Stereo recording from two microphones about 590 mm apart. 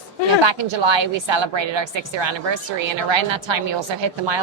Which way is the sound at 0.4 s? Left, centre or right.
Right.